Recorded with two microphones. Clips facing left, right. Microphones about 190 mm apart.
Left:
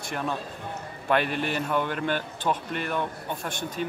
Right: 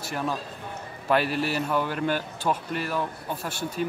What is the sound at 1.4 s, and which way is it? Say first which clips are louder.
Speech: right 1 dB; 5° right (ahead or behind).